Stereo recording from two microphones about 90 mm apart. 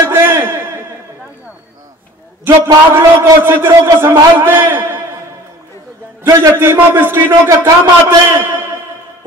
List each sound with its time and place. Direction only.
0.0 s a sound: 25° right (ahead or behind)
2.4 s a man's voice: 25° right (ahead or behind)
6.2 s a man's voice: 30° right (ahead or behind)